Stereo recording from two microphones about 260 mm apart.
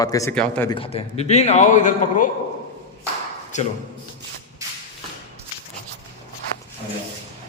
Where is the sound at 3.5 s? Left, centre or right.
Left.